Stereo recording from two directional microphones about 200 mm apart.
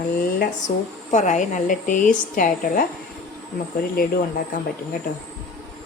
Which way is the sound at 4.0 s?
45° left (ahead or behind).